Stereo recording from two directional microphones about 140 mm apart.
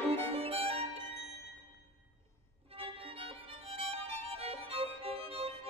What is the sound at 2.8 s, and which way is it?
Violin, 40° right (ahead or behind).